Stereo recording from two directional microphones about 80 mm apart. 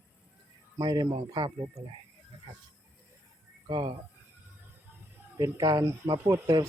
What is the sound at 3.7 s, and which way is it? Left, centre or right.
Speech, right.